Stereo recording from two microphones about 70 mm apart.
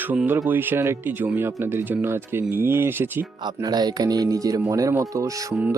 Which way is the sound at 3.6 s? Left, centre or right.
Right.